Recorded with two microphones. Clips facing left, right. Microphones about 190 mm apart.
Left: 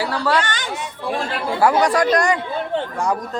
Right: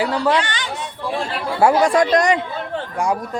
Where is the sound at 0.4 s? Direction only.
45° left (ahead or behind).